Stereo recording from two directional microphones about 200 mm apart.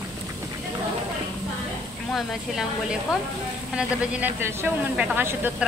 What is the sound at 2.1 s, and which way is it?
A woman's voice, centre (ahead or behind).